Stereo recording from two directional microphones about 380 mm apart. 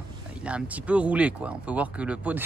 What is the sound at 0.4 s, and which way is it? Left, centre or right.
Speech, centre.